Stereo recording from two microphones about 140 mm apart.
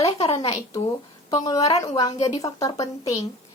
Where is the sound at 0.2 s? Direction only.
45° left (ahead or behind).